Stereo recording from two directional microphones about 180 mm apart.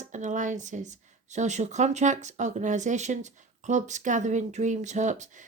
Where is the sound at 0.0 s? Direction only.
45° right (ahead or behind).